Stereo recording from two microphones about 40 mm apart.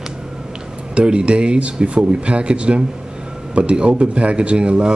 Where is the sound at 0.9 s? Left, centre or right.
Right.